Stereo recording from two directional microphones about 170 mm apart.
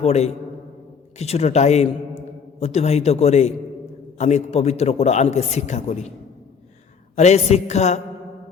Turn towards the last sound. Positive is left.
turn(degrees=40)  # may be behind; listen again after turning